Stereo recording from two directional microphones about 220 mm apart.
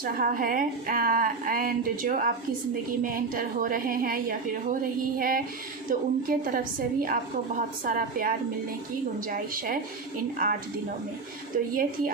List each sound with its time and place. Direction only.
0.0 s a woman's voice: 40° right (ahead or behind)
10.3 s a woman's voice: 40° right (ahead or behind)
11.7 s a woman's voice: 40° right (ahead or behind)